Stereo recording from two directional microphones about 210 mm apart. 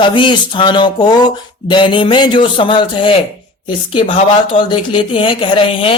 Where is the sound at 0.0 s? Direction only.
25° left (ahead or behind).